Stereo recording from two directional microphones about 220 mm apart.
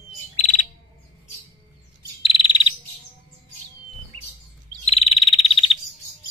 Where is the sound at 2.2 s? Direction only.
25° left (ahead or behind).